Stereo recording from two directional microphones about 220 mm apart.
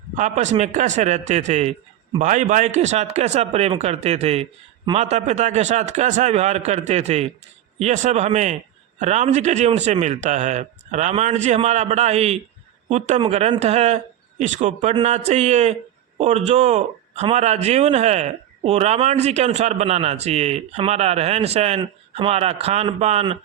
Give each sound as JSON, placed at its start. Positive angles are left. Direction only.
{"t": 0.2, "sound": "speech", "side_deg": -30}